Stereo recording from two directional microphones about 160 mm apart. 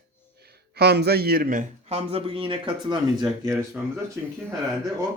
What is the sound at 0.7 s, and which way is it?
Speech, 90° right.